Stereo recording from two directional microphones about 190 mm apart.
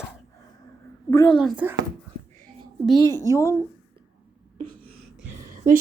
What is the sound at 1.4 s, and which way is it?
Speech, centre (ahead or behind).